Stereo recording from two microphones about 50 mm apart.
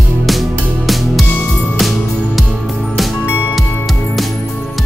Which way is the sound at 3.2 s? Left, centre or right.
Left.